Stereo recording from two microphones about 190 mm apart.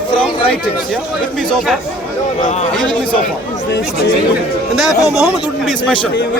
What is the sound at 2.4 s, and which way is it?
Speech, 35° left (ahead or behind).